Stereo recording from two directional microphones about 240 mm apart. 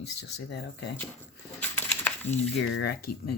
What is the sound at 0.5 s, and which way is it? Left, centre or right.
Speech, left.